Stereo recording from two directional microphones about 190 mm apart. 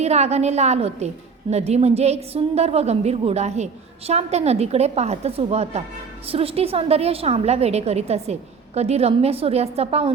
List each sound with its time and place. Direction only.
0.0 s a woman's voice: 35° right (ahead or behind)